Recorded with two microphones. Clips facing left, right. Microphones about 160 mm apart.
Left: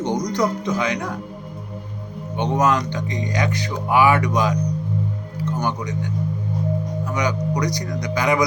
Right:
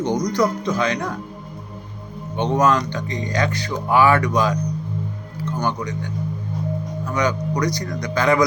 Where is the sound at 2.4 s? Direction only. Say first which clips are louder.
Right 1 dB; 15° left (ahead or behind).